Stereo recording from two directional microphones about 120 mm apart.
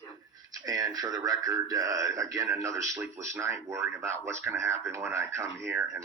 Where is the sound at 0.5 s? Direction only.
30° right (ahead or behind).